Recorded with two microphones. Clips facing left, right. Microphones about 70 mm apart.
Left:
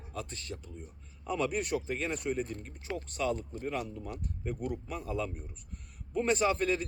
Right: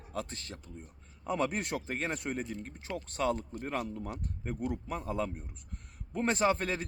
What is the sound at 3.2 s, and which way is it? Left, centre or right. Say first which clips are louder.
A man's voice: right 2 dB; right.